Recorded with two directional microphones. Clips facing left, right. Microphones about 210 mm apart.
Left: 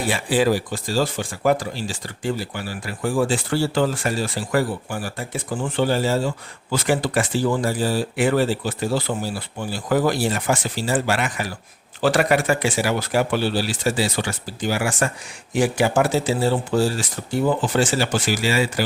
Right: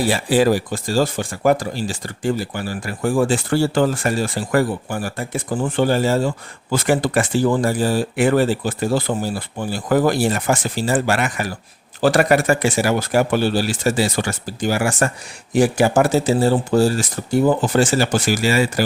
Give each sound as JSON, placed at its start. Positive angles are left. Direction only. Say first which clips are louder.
{"t": 0.1, "sound": "speech", "louder": "right 1 dB", "side_deg": -40}